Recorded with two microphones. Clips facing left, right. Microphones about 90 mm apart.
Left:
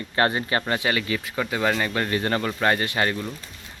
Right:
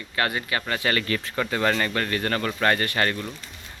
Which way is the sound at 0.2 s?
30° left (ahead or behind).